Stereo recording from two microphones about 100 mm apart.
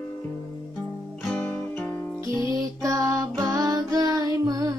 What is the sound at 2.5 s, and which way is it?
Music, 35° right (ahead or behind).